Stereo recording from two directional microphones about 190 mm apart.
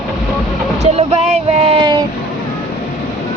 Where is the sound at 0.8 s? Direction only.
35° right (ahead or behind).